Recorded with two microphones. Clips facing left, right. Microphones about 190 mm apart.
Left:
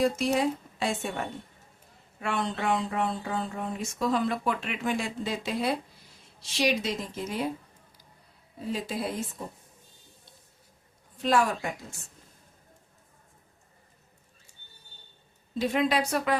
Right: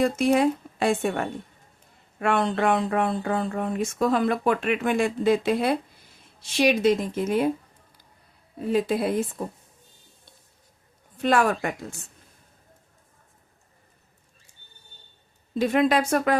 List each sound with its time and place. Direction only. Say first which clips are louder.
0.0 s speech: right 5 dB; 55° right (ahead or behind)
8.6 s speech: right 8 dB; 60° right (ahead or behind)
11.2 s speech: right 4 dB; 60° right (ahead or behind)
15.5 s speech: right 5 dB; 55° right (ahead or behind)